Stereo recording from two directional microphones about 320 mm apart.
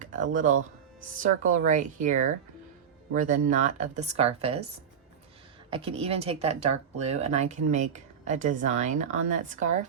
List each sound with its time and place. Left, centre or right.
0.0 s speech: right
5.7 s speech: centre